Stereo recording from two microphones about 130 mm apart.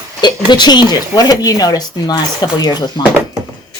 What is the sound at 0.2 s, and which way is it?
Speech, 35° left (ahead or behind).